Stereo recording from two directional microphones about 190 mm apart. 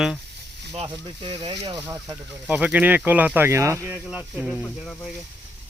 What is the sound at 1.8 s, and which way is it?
Speech, 10° right (ahead or behind).